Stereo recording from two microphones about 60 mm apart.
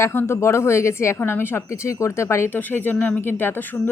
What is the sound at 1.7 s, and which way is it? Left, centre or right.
Speech, left.